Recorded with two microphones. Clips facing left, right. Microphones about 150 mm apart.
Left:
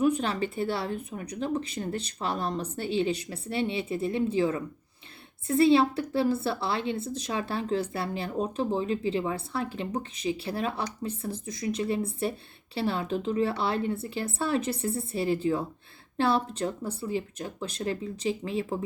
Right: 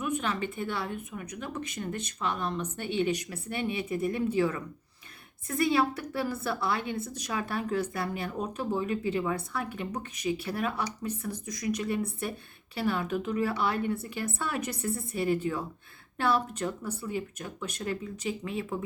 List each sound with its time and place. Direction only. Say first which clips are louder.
0.0 s a woman's voice: left 5 dB; 35° left (ahead or behind)